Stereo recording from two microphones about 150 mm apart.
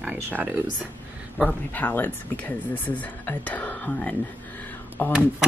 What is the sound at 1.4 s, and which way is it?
Speech, 10° left (ahead or behind).